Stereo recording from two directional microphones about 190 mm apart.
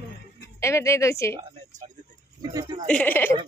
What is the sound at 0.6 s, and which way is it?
Speech, 15° left (ahead or behind).